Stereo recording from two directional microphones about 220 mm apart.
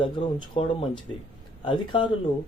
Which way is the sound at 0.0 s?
20° left (ahead or behind).